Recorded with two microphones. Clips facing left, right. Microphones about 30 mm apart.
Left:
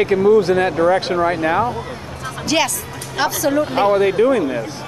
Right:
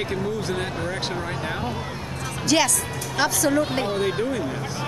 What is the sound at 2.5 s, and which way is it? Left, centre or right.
Speech, centre.